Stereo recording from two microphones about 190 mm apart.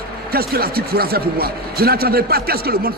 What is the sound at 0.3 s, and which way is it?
A man's voice, 55° right (ahead or behind).